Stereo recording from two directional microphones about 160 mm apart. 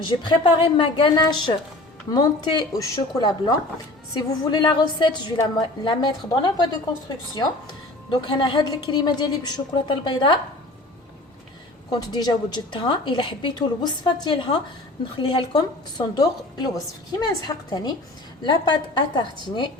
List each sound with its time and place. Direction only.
0.0 s a woman's voice: 30° left (ahead or behind)
8.1 s a woman's voice: 30° left (ahead or behind)
11.9 s a woman's voice: 25° left (ahead or behind)